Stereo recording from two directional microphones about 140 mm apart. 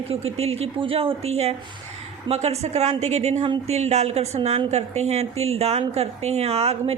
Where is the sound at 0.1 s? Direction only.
45° right (ahead or behind).